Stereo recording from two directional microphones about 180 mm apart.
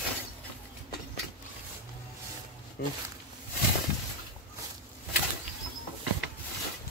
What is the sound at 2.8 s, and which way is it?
Speech, 60° left (ahead or behind).